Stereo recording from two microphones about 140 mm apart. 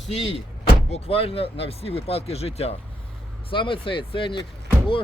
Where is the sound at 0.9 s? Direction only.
45° left (ahead or behind).